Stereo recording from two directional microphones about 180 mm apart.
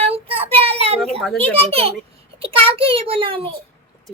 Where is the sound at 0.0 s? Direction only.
30° right (ahead or behind).